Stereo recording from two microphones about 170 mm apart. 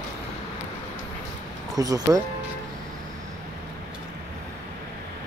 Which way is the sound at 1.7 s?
20° right (ahead or behind).